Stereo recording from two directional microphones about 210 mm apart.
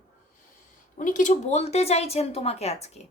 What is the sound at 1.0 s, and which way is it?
A woman's voice, 35° left (ahead or behind).